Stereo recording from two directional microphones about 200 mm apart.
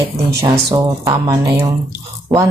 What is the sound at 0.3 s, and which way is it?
A woman's voice, 15° right (ahead or behind).